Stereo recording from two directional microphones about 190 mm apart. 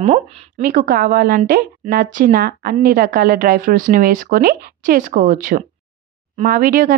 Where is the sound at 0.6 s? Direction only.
50° right (ahead or behind).